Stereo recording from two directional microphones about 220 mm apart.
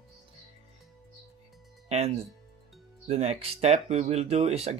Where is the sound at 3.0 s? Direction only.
30° right (ahead or behind).